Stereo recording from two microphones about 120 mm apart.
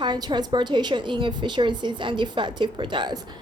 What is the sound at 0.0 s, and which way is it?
A woman's voice, 40° right (ahead or behind).